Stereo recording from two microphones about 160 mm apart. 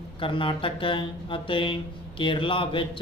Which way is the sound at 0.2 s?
30° left (ahead or behind).